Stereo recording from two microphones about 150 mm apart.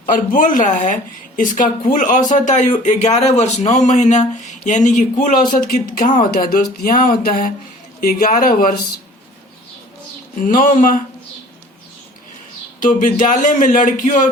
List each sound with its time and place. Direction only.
0.0 s speech: 60° left (ahead or behind)
6.3 s a sound: 75° left (ahead or behind)
10.4 s speech: 65° left (ahead or behind)
12.8 s speech: 60° left (ahead or behind)